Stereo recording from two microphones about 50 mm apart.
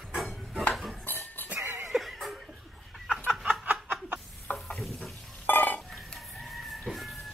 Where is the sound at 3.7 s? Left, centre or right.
Right.